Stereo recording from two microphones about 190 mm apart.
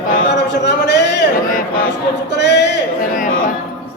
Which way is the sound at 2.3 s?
65° left (ahead or behind).